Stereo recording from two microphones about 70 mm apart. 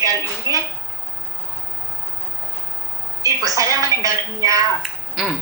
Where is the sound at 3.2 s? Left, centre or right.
Right.